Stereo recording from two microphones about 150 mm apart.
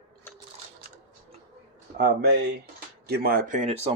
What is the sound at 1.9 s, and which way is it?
Speech, 90° right.